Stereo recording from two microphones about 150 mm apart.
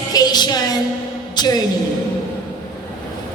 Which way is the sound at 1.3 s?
25° left (ahead or behind).